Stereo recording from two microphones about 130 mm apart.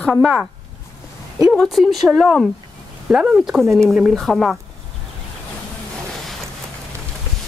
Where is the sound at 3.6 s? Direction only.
20° right (ahead or behind).